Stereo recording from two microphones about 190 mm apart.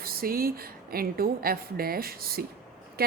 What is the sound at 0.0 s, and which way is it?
A woman's voice, 50° right (ahead or behind).